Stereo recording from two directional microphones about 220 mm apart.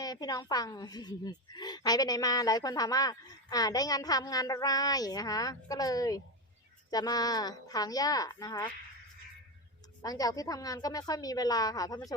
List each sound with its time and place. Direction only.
0.0 s speech: 15° left (ahead or behind)
10.0 s speech: 15° left (ahead or behind)